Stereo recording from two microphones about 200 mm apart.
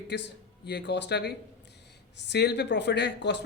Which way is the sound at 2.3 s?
55° left (ahead or behind).